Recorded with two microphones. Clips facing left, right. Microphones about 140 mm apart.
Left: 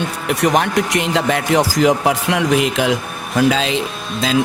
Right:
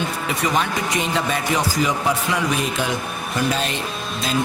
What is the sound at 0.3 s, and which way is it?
A man's voice, 80° left.